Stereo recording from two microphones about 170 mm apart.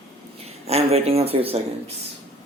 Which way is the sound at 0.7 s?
35° right (ahead or behind).